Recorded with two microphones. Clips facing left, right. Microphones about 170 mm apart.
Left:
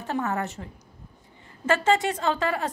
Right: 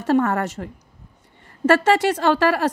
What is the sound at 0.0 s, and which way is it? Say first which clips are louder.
Speech: right 9 dB; 90° right.